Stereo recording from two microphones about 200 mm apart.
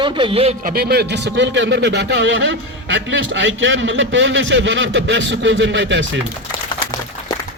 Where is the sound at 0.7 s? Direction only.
50° right (ahead or behind).